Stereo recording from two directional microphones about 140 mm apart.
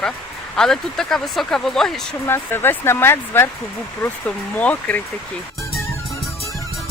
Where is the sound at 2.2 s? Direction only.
15° left (ahead or behind).